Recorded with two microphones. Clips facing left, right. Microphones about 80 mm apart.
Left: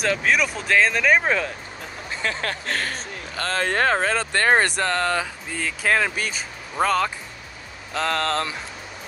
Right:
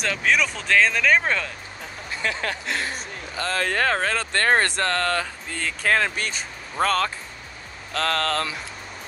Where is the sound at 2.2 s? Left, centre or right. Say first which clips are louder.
Even; left.